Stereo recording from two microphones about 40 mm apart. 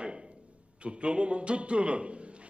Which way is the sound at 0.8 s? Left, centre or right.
Right.